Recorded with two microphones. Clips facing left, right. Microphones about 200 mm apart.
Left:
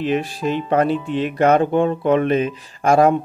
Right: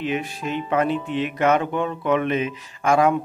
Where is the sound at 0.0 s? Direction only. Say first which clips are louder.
Left 5 dB; 35° left (ahead or behind).